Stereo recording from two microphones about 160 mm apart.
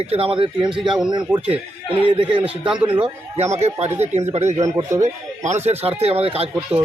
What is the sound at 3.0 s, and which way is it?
Speech, 45° right (ahead or behind).